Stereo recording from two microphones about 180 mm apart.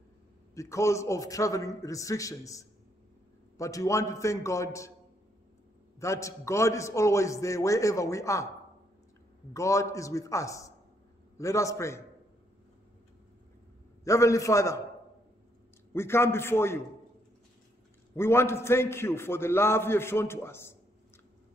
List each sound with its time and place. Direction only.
0.6 s a man's voice: 15° left (ahead or behind)
5.9 s a man's voice: 15° left (ahead or behind)
9.5 s a man's voice: 15° left (ahead or behind)
14.0 s a man's voice: 15° left (ahead or behind)
15.9 s a man's voice: 15° left (ahead or behind)
18.1 s a man's voice: 15° left (ahead or behind)